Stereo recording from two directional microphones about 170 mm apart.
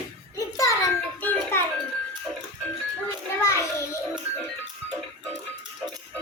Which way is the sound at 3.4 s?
15° left (ahead or behind).